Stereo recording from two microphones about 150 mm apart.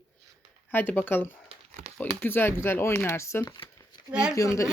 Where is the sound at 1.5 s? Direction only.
50° right (ahead or behind).